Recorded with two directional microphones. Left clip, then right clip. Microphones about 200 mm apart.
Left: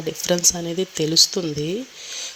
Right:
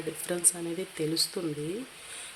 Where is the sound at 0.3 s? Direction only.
30° left (ahead or behind).